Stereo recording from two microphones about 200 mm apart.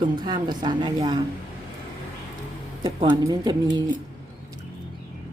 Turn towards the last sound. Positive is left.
turn(degrees=-20)  # may be behind; listen again after turning